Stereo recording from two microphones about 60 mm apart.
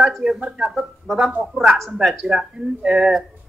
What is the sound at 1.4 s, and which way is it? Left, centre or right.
Speech, centre.